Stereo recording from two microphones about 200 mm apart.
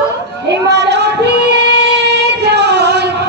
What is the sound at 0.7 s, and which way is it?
Music, 55° right (ahead or behind).